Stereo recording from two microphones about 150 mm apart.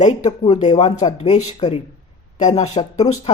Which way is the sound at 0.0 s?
45° left (ahead or behind).